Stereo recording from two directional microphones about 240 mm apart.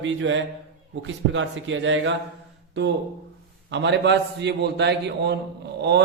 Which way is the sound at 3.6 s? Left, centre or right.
Right.